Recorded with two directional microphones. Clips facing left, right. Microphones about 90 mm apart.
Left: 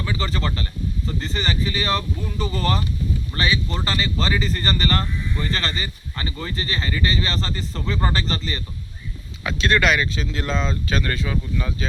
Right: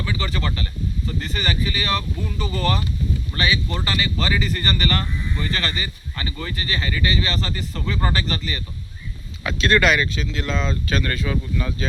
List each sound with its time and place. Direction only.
0.0 s speech: 30° left (ahead or behind)
9.4 s speech: 15° left (ahead or behind)
10.5 s speech: centre (ahead or behind)
10.8 s speech: 20° left (ahead or behind)